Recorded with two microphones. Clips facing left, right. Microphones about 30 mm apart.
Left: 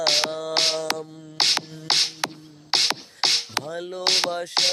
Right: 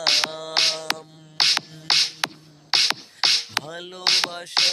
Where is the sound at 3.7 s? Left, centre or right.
Right.